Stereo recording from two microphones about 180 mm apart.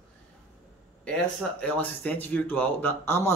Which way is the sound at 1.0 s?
5° left (ahead or behind).